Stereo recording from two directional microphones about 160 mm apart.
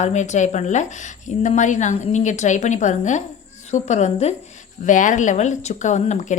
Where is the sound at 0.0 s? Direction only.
45° left (ahead or behind).